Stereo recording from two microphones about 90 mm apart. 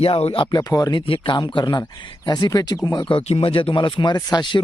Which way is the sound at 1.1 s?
65° left (ahead or behind).